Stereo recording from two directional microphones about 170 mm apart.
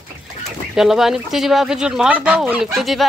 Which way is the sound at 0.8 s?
Centre (ahead or behind).